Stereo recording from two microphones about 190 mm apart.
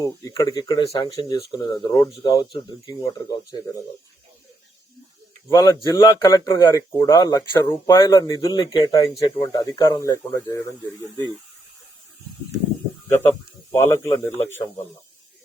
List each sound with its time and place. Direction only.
0.0 s speech: 15° left (ahead or behind)
5.5 s speech: 20° left (ahead or behind)
13.7 s speech: 15° left (ahead or behind)